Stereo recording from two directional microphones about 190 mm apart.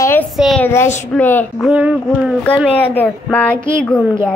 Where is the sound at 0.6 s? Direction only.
15° left (ahead or behind).